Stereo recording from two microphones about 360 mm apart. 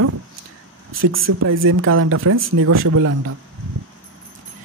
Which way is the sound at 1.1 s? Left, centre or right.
Right.